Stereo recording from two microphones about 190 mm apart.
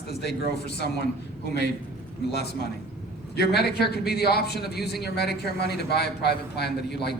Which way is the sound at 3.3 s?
60° left (ahead or behind).